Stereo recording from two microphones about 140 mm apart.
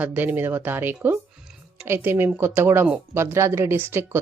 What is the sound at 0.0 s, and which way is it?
Speech, 10° right (ahead or behind).